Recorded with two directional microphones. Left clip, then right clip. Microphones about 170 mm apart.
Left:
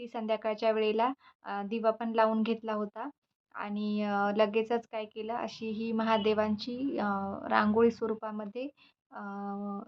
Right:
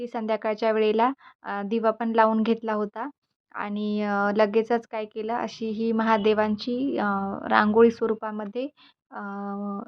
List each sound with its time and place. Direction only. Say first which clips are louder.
0.0 s speech: right 6 dB; 40° right (ahead or behind)